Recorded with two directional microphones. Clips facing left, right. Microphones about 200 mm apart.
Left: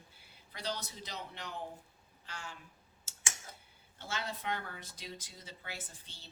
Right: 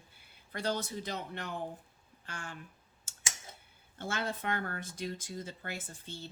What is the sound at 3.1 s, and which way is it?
Tick-tock, 50° right (ahead or behind).